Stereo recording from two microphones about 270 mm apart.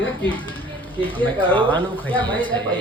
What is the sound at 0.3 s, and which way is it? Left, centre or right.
Speech, centre.